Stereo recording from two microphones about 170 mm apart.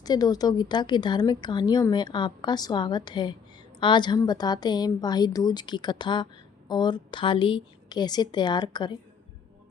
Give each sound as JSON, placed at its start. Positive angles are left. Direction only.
{"t": 0.0, "sound": "a woman's voice", "side_deg": 20}